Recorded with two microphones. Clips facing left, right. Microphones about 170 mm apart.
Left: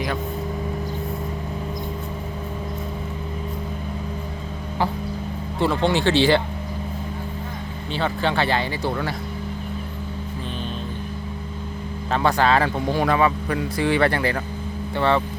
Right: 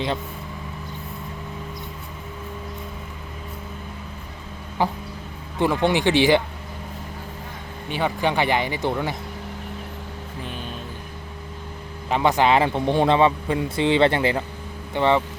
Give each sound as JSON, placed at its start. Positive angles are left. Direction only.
{"t": 4.8, "sound": "speech", "side_deg": -15}
{"t": 7.9, "sound": "speech", "side_deg": -15}
{"t": 12.1, "sound": "a man's voice", "side_deg": -20}